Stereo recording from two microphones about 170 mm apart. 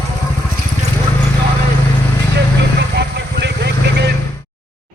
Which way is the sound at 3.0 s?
80° right.